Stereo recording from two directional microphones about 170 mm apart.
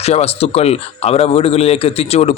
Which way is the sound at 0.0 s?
40° left (ahead or behind).